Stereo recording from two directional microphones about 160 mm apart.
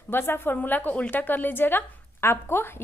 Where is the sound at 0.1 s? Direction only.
15° left (ahead or behind).